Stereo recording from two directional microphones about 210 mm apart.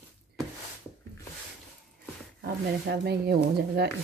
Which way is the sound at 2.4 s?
50° right (ahead or behind).